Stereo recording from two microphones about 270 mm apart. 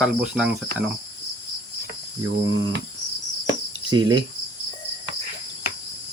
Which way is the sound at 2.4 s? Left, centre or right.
Right.